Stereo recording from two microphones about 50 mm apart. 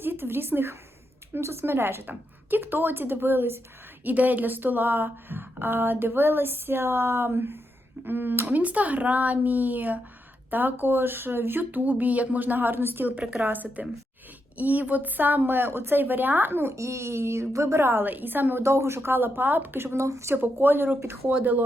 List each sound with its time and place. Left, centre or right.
0.0 s a woman's voice: right
4.0 s a woman's voice: right
13.1 s speech: right
16.7 s a child's voice: right
18.6 s a woman's voice: right
20.0 s speech: right
20.3 s a woman's voice: right